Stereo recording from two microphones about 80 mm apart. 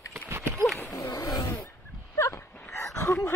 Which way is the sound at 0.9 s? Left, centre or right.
Left.